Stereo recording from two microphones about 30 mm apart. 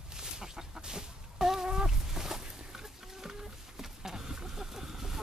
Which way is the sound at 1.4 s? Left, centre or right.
Centre.